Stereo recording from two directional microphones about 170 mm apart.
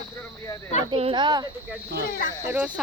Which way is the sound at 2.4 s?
10° right (ahead or behind).